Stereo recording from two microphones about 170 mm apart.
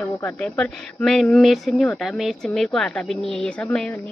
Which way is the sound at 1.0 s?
Centre (ahead or behind).